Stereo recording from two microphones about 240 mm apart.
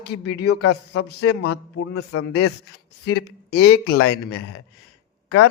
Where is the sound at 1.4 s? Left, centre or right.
Left.